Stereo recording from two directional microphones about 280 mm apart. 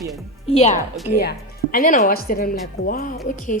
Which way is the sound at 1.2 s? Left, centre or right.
Left.